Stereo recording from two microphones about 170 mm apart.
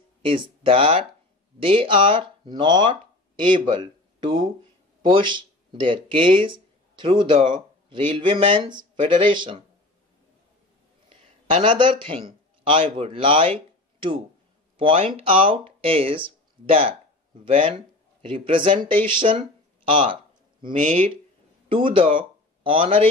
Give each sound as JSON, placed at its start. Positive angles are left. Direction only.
{"t": 0.2, "sound": "speech", "side_deg": -30}
{"t": 11.1, "sound": "a man's voice", "side_deg": -30}
{"t": 14.8, "sound": "speech", "side_deg": -30}
{"t": 18.2, "sound": "speech", "side_deg": -30}